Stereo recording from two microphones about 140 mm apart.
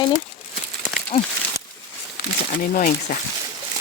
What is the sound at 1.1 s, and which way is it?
Speech, 40° left (ahead or behind).